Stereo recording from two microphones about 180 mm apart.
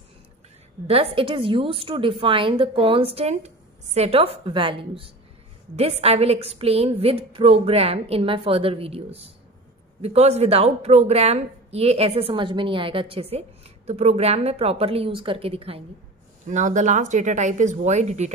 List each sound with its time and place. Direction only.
0.8 s a woman's voice: 30° right (ahead or behind)
16.4 s speech: 45° right (ahead or behind)